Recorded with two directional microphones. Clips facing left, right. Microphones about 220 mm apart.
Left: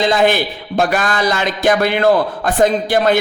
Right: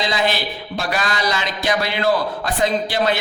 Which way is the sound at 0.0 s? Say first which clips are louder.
Left 7 dB; 50° left (ahead or behind).